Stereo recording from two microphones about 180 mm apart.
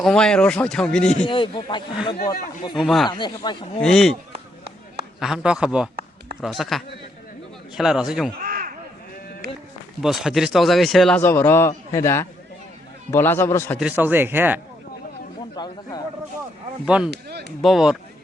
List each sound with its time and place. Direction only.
0.0 s speech: 5° left (ahead or behind)
1.3 s speech: 25° left (ahead or behind)
2.7 s speech: centre (ahead or behind)
3.1 s speech: 25° left (ahead or behind)
3.8 s speech: 5° left (ahead or behind)
5.2 s speech: 5° right (ahead or behind)
8.4 s a sound: 50° right (ahead or behind)
10.0 s a man's voice: centre (ahead or behind); by 13.7 s 15° left (ahead or behind)
13.7 s speech: 10° right (ahead or behind)
15.5 s speech: 20° left (ahead or behind)
16.8 s speech: 5° right (ahead or behind)
17.1 s speech: 65° right (ahead or behind)
17.6 s speech: centre (ahead or behind)